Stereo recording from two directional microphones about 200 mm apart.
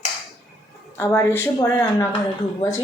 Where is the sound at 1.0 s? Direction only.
10° left (ahead or behind).